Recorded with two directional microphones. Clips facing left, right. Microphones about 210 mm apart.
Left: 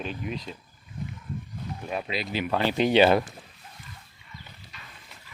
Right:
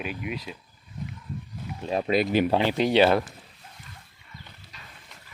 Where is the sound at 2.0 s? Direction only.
50° right (ahead or behind).